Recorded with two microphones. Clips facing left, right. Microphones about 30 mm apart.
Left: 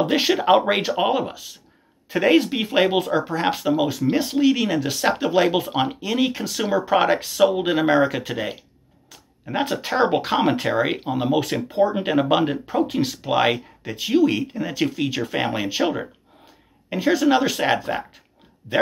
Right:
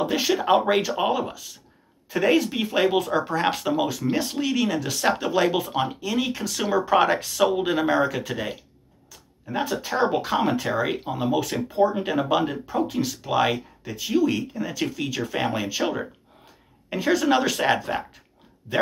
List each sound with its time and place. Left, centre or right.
0.0 s speech: left
0.3 s speech: left
3.1 s speech: centre
9.1 s speech: left; by 18.2 s centre